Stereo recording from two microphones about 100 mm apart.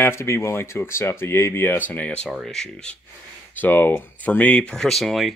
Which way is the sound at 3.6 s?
20° left (ahead or behind).